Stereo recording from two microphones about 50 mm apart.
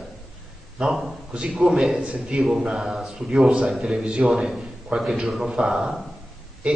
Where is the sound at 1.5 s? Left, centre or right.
Centre.